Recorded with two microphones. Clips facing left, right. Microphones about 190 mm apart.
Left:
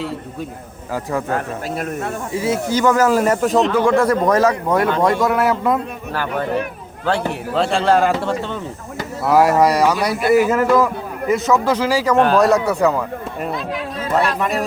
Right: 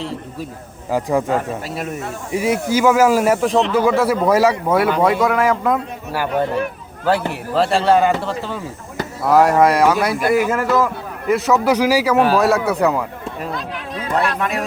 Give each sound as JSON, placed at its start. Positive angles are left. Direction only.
{"t": 0.9, "sound": "speech", "side_deg": -15}
{"t": 1.7, "sound": "speech", "side_deg": 0}
{"t": 2.3, "sound": "speech", "side_deg": -15}
{"t": 7.0, "sound": "a man's voice", "side_deg": -5}